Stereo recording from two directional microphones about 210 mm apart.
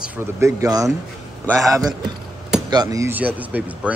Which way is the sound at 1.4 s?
Centre (ahead or behind).